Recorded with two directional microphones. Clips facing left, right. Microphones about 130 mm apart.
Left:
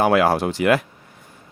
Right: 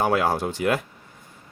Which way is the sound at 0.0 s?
80° left.